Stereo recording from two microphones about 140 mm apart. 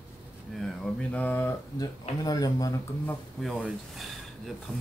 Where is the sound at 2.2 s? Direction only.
25° left (ahead or behind).